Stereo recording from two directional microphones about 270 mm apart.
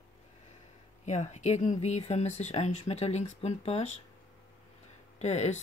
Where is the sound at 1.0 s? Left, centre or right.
Left.